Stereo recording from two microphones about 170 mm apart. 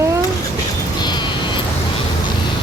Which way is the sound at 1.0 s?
25° left (ahead or behind).